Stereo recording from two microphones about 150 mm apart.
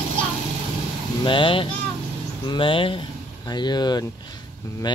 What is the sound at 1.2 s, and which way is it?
Speech, 35° left (ahead or behind).